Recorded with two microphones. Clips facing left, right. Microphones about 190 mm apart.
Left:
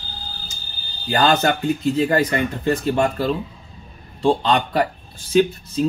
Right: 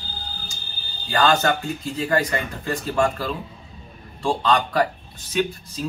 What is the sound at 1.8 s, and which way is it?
Speech, 25° left (ahead or behind).